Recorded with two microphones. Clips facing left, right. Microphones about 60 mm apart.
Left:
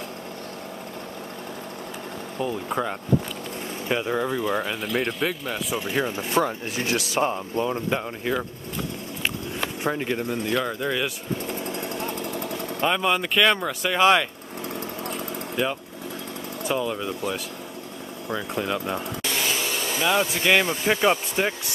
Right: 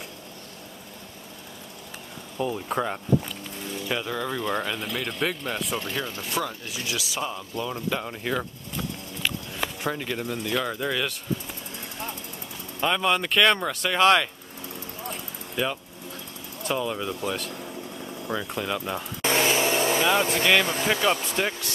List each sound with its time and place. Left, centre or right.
2.4 s speech: centre
3.9 s speech: left
4.3 s speech: centre
5.9 s speech: left
6.3 s speech: left
8.0 s speech: centre
9.8 s speech: left
10.5 s speech: centre
12.8 s speech: centre
15.5 s speech: centre
19.2 s a sound: right
20.4 s speech: centre